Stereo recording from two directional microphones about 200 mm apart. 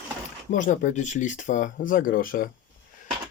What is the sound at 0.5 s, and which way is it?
Speech, 40° left (ahead or behind).